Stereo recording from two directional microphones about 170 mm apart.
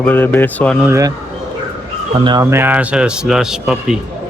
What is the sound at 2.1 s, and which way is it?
Speech, 30° right (ahead or behind).